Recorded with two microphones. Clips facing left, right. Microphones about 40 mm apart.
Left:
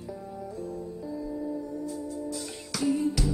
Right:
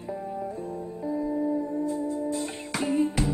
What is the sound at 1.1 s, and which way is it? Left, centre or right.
Music, right.